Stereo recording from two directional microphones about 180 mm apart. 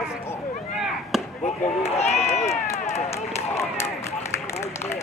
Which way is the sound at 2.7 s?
15° left (ahead or behind).